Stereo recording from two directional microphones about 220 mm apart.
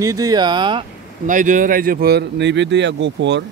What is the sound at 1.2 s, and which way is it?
Speech, 35° right (ahead or behind).